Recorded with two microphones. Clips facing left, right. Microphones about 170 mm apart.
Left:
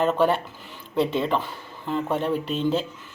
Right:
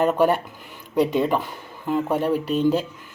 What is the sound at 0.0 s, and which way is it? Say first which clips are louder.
Speech: right 2 dB; 15° right (ahead or behind).